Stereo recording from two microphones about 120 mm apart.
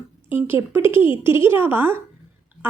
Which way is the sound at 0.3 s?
15° right (ahead or behind).